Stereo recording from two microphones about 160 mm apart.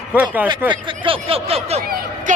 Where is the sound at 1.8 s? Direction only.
70° right (ahead or behind).